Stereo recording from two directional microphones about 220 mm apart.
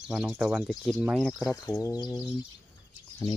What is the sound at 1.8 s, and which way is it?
Speech, 15° left (ahead or behind).